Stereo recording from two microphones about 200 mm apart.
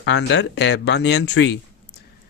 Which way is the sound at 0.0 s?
65° left (ahead or behind).